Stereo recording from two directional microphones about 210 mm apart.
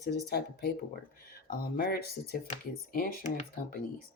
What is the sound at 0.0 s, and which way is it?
Speech, 50° left (ahead or behind).